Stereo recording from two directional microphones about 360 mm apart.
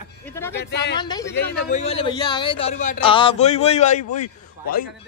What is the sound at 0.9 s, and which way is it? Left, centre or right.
A man's voice, centre.